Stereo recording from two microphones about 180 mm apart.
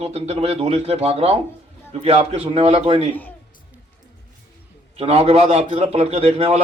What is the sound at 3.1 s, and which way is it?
Speech, 10° left (ahead or behind).